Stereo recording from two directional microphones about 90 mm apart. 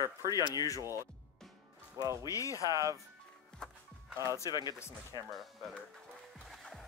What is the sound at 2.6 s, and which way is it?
Speech, 40° right (ahead or behind).